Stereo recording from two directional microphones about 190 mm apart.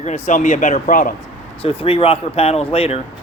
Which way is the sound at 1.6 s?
30° left (ahead or behind).